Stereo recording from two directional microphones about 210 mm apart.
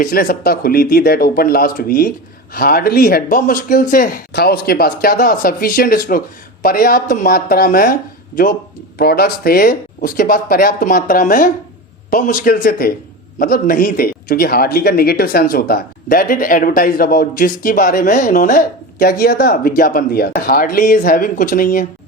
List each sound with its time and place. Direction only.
0.0 s speech: 40° left (ahead or behind)
9.0 s speech: 50° left (ahead or behind)